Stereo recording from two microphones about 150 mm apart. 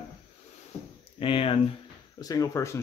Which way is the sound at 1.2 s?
40° left (ahead or behind).